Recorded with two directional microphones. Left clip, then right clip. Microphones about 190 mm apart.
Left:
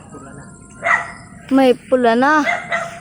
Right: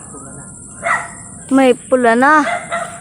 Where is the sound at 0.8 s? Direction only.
40° left (ahead or behind).